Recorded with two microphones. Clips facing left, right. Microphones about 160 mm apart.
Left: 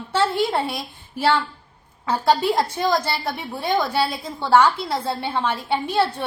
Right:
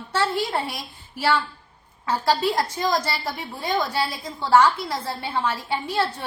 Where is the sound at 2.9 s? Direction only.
25° left (ahead or behind).